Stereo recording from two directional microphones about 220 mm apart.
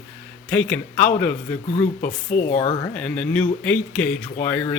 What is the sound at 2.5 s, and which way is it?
Speech, 30° left (ahead or behind).